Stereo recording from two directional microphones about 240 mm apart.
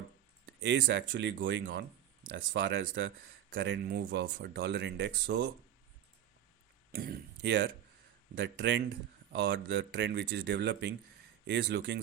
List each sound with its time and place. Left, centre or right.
0.6 s speech: right
6.9 s speech: right